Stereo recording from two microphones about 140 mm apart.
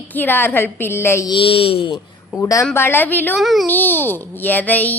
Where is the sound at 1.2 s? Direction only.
40° left (ahead or behind).